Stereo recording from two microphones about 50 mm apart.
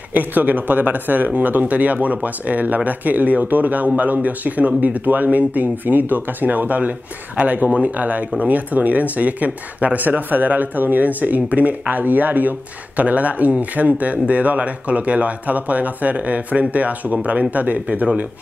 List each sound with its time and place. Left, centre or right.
0.1 s speech: right